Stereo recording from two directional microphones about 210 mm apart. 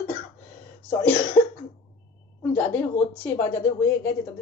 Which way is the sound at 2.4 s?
10° left (ahead or behind).